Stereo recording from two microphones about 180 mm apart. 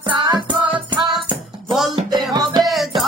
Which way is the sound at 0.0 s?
25° right (ahead or behind).